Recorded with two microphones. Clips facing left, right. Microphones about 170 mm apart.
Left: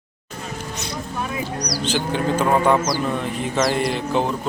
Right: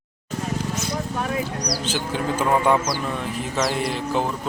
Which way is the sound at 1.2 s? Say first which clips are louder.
Left 2 dB; 55° right (ahead or behind).